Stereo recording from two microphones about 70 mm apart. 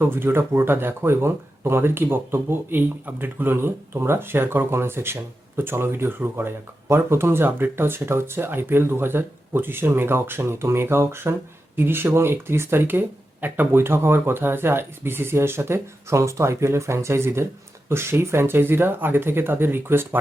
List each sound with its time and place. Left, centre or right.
0.0 s speech: right